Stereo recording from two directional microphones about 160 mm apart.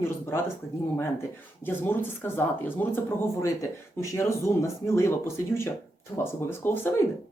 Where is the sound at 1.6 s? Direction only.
15° left (ahead or behind).